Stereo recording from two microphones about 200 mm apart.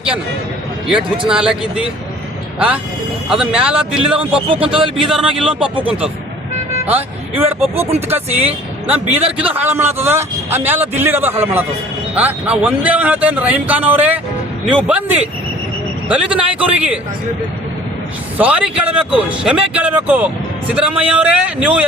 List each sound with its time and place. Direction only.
1.3 s speech: 5° right (ahead or behind)
4.4 s a man's voice: 25° right (ahead or behind)
4.8 s speech: centre (ahead or behind)
5.5 s a man's voice: 25° right (ahead or behind)
6.9 s speech: 10° right (ahead or behind)
8.9 s a man's voice: 30° right (ahead or behind)
9.5 s speech: 10° right (ahead or behind)
18.3 s speech: 5° right (ahead or behind)